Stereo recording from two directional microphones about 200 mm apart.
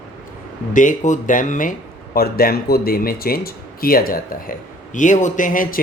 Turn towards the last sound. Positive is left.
turn(degrees=40)  # may be behind; listen again after turning